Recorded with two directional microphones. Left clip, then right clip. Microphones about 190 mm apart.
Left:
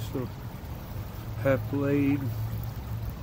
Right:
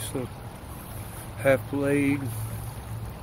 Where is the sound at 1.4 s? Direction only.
10° right (ahead or behind).